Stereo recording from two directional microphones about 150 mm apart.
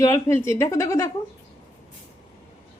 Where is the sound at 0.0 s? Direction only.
20° left (ahead or behind).